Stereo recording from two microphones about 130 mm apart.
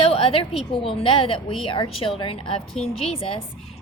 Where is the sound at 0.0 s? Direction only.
45° left (ahead or behind).